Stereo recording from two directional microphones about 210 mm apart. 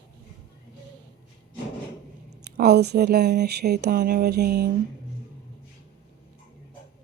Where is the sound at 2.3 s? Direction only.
50° right (ahead or behind).